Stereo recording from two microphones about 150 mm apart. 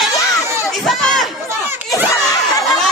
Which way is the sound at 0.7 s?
Centre (ahead or behind).